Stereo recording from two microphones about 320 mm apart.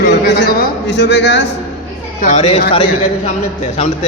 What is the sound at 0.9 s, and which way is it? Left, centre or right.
Speech, left.